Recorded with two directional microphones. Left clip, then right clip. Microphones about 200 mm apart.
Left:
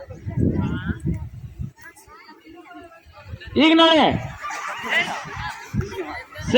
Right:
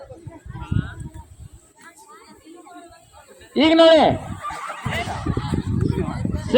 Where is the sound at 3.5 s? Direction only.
50° left (ahead or behind).